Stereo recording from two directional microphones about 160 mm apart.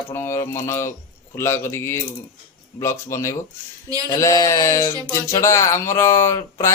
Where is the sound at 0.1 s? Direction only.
15° left (ahead or behind).